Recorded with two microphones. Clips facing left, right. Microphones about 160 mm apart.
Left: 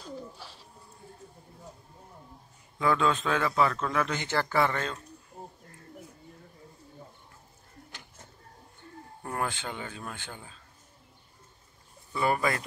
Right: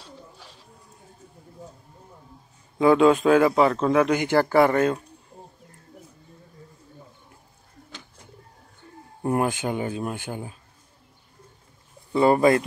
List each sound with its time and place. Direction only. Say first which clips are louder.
2.8 s speech: right 10 dB; 25° right (ahead or behind); by 5.0 s 45° right (ahead or behind)
9.2 s speech: right 10 dB; 20° right (ahead or behind)
12.1 s speech: right 10 dB; 25° right (ahead or behind)